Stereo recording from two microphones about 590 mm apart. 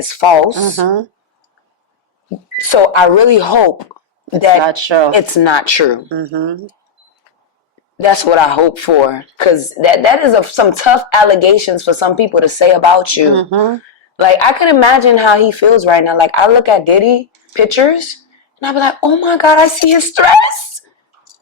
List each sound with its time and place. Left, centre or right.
0.0 s speech: left
0.8 s speech: right
2.6 s speech: left
4.6 s speech: right
5.1 s speech: left
6.1 s speech: right
8.0 s speech: left
13.3 s speech: right
14.2 s speech: left